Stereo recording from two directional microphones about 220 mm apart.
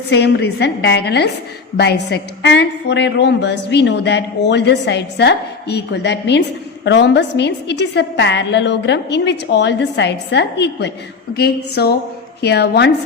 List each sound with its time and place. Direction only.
0.1 s a woman's voice: 50° left (ahead or behind)